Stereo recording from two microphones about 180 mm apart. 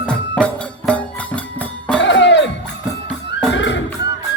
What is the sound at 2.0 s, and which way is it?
Music, 80° left.